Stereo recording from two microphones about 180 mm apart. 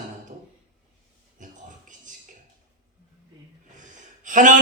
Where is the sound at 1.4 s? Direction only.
45° right (ahead or behind).